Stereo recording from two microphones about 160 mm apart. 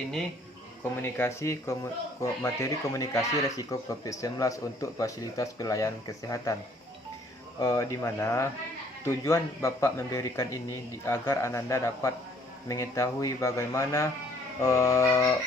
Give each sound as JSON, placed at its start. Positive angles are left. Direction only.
{"t": 1.0, "sound": "speech", "side_deg": 15}
{"t": 7.6, "sound": "speech", "side_deg": 20}